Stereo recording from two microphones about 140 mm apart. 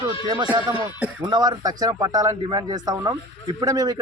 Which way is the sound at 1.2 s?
30° right (ahead or behind).